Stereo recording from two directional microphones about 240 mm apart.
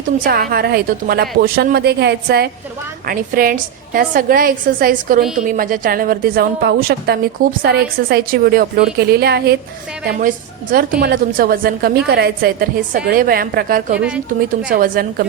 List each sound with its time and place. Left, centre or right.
0.3 s a woman's voice: right